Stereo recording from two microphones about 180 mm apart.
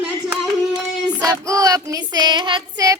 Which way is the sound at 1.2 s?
20° right (ahead or behind).